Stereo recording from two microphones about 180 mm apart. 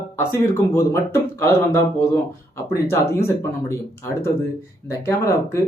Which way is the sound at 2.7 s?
15° left (ahead or behind).